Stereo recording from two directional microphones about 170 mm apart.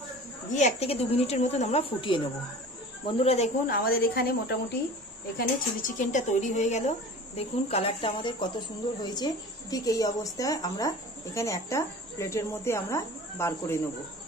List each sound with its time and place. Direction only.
0.5 s speech: 45° left (ahead or behind)
3.6 s a woman's voice: 60° left (ahead or behind)
5.4 s speech: 55° left (ahead or behind); by 13.7 s 15° left (ahead or behind)